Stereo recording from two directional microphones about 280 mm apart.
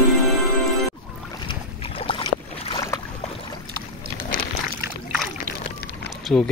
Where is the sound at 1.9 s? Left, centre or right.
Centre.